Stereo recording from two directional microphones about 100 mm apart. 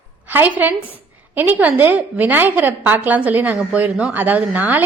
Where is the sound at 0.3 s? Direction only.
20° right (ahead or behind).